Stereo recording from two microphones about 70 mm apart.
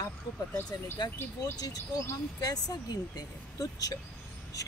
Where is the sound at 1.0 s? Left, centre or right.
Left.